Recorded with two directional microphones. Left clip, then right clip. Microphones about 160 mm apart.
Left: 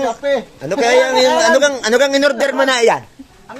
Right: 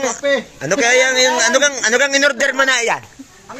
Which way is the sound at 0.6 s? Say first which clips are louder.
Left 1 dB; 5° left (ahead or behind).